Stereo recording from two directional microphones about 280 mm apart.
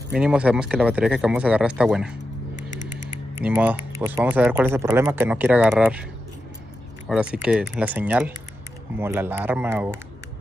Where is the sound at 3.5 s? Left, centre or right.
Centre.